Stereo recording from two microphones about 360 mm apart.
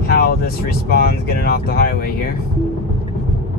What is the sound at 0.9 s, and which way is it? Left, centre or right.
Speech, left.